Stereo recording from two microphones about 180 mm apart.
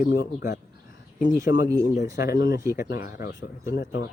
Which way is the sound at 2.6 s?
15° right (ahead or behind).